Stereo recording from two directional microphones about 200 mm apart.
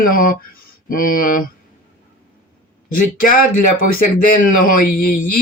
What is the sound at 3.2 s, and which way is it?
A man's voice, 45° left (ahead or behind).